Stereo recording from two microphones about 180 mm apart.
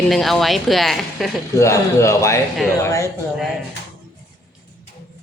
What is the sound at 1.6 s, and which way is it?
Speech, 15° left (ahead or behind).